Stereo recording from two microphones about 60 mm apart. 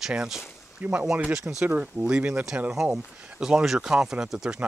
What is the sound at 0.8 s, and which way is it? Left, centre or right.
Speech, right.